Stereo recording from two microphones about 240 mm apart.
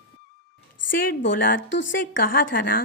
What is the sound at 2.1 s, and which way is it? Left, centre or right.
Speech, left.